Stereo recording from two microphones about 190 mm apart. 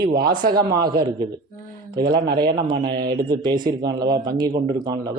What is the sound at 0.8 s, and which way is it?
Speech, 20° right (ahead or behind).